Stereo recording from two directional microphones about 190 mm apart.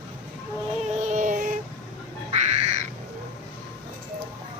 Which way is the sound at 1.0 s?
40° right (ahead or behind).